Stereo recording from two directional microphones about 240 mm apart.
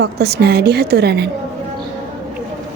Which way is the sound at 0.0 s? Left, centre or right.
Right.